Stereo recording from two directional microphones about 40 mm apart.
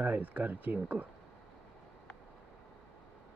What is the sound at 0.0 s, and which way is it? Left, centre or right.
Speech, right.